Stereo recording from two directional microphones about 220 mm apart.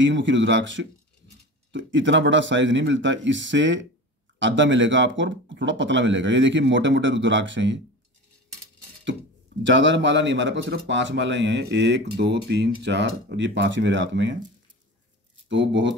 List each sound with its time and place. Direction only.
0.0 s speech: 55° right (ahead or behind)
9.6 s speech: 55° right (ahead or behind)
15.4 s speech: 55° right (ahead or behind)